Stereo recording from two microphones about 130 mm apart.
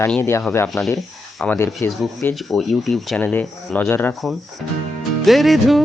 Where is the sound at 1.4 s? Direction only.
15° left (ahead or behind).